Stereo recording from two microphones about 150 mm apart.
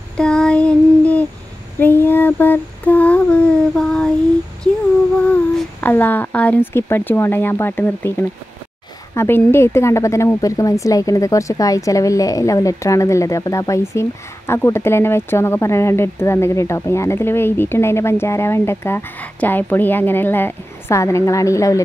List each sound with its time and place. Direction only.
0.2 s child singing: 5° left (ahead or behind)
1.8 s female singing: 15° left (ahead or behind)
5.2 s speech: 10° left (ahead or behind)